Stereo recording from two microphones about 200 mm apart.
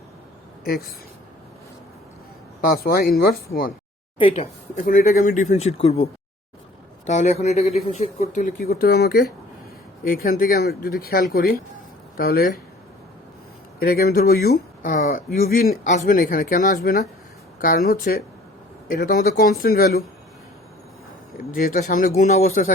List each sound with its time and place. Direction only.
2.6 s speech: 45° left (ahead or behind)
4.2 s speech: 30° left (ahead or behind); by 12.5 s 50° left (ahead or behind)
13.7 s speech: 50° left (ahead or behind)
21.5 s speech: 45° left (ahead or behind)